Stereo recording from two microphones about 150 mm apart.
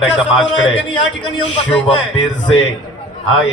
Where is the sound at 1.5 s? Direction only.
40° left (ahead or behind).